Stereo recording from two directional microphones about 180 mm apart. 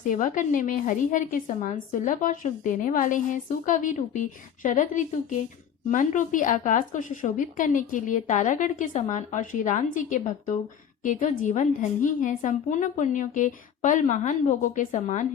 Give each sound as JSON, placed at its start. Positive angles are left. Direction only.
{"t": 0.1, "sound": "a woman's voice", "side_deg": 45}